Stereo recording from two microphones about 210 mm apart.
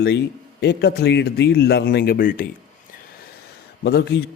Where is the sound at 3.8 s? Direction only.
55° left (ahead or behind).